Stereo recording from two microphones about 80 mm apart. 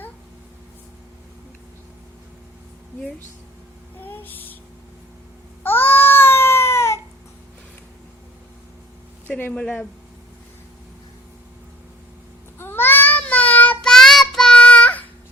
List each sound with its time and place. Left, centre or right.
4.0 s a sound: left
5.6 s babbling: left
9.4 s speech: centre
12.5 s baby cry: left
13.8 s child singing: centre